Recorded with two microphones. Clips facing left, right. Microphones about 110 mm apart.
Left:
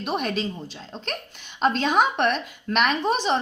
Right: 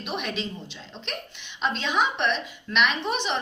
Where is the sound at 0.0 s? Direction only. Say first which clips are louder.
Left 5 dB; 45° left (ahead or behind).